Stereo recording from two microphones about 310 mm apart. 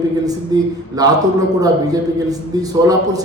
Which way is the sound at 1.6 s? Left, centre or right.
Centre.